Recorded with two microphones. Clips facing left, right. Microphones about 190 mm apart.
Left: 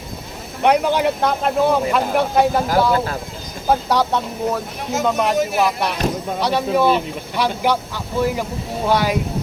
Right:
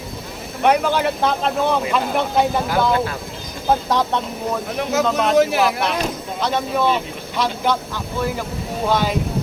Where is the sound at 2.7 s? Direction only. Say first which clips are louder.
Left 1 dB; 40° left (ahead or behind).